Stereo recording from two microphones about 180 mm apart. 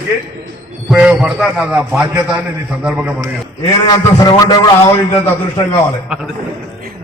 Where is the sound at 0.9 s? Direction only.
5° right (ahead or behind).